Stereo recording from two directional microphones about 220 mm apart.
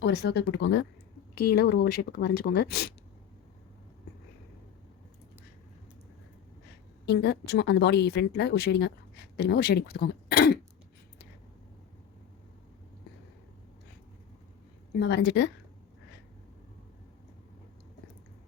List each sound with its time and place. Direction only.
0.0 s a woman's voice: 50° left (ahead or behind)
7.0 s a woman's voice: 50° left (ahead or behind)
14.9 s a woman's voice: 50° left (ahead or behind)